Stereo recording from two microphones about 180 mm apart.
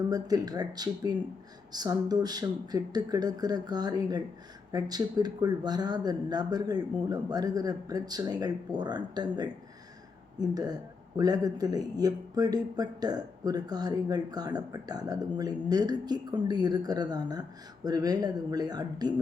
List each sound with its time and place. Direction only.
0.1 s speech: 20° right (ahead or behind)